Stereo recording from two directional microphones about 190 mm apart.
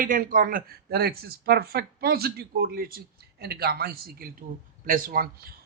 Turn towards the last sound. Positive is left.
turn(degrees=-50)  # may be behind; listen again after turning